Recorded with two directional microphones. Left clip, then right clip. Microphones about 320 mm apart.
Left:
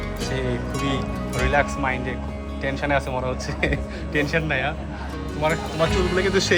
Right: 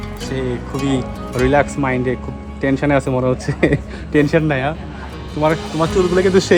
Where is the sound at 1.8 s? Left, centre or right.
Centre.